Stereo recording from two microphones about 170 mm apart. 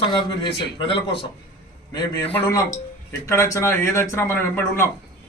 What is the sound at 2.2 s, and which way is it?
A man's voice, 10° left (ahead or behind).